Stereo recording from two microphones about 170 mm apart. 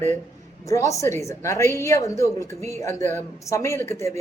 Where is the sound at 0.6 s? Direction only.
20° left (ahead or behind).